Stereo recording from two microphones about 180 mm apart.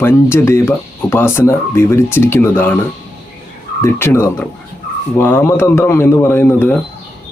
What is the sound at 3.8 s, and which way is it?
Speech, 15° left (ahead or behind).